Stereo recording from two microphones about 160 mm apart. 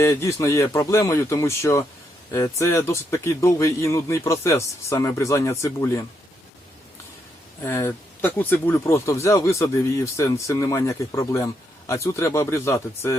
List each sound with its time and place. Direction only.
0.0 s speech: 20° left (ahead or behind)
7.6 s speech: 15° left (ahead or behind)